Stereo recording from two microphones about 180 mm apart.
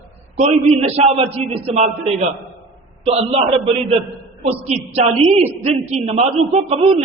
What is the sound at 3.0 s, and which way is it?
A man's voice, 35° right (ahead or behind).